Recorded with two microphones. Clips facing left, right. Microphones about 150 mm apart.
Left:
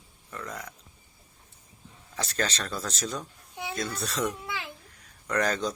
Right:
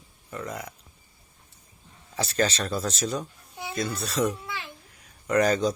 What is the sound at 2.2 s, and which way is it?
Speech, 5° right (ahead or behind).